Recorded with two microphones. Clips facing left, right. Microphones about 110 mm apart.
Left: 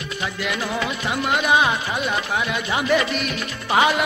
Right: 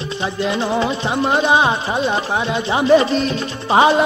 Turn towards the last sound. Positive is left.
turn(degrees=-30)  # may be behind; listen again after turning